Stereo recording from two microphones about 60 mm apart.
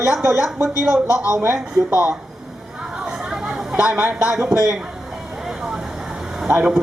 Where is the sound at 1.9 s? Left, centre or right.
Right.